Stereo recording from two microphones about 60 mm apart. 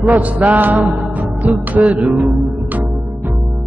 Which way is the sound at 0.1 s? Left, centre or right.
Right.